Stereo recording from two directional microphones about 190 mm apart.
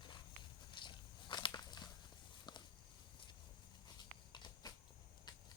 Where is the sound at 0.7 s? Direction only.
25° left (ahead or behind).